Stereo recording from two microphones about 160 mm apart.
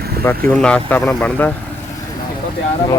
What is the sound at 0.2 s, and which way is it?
Speech, 15° left (ahead or behind).